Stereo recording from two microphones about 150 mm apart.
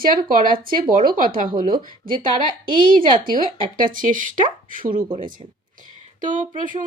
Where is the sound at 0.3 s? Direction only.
65° right (ahead or behind).